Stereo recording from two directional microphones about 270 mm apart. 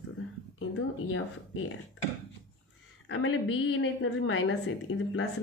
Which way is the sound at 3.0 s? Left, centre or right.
Left.